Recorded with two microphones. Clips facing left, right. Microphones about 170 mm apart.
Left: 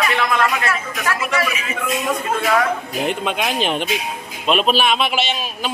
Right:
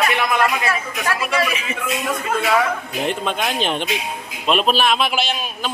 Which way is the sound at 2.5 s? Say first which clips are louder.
Left 1 dB; centre (ahead or behind).